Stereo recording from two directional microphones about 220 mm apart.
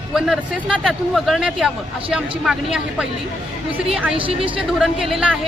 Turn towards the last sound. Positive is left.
turn(degrees=-5)  # may be behind; listen again after turning